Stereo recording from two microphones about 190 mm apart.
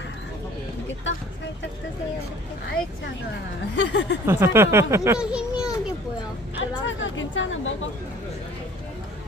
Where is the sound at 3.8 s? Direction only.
70° left (ahead or behind).